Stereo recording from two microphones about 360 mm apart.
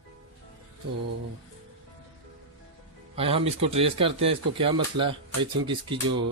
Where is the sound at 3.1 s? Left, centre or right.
Centre.